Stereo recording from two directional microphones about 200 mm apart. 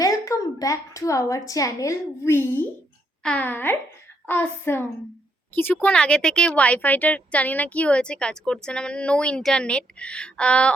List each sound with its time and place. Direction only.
0.0 s a woman's voice: 15° left (ahead or behind)